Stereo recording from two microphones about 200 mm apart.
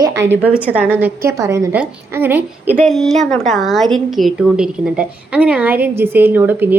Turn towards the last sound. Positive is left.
turn(degrees=-10)  # may be behind; listen again after turning